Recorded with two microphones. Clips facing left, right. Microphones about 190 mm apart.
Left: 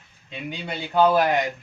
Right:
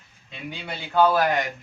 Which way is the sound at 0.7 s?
20° left (ahead or behind).